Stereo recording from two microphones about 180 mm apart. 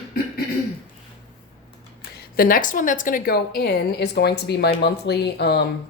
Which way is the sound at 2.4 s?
50° left (ahead or behind).